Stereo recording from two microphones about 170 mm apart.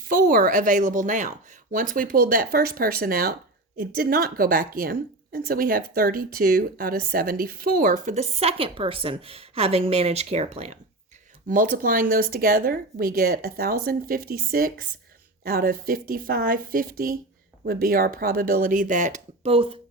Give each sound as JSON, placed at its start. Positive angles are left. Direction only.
{"t": 0.0, "sound": "a woman's voice", "side_deg": -55}
{"t": 11.4, "sound": "a woman's voice", "side_deg": -50}